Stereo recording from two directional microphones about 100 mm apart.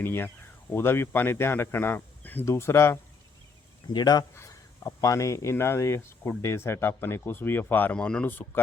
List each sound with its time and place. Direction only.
0.0 s speech: 20° left (ahead or behind)
3.9 s speech: 45° left (ahead or behind)
4.4 s speech: 30° left (ahead or behind)